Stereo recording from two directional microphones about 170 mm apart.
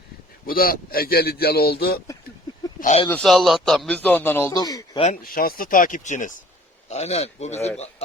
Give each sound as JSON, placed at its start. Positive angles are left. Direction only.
{"t": 0.4, "sound": "speech", "side_deg": 60}
{"t": 2.8, "sound": "speech", "side_deg": 35}
{"t": 3.1, "sound": "speech", "side_deg": 5}
{"t": 5.2, "sound": "speech", "side_deg": 60}
{"t": 6.9, "sound": "speech", "side_deg": 40}